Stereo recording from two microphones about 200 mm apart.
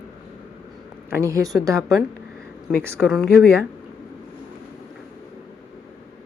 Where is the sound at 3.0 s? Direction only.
Centre (ahead or behind).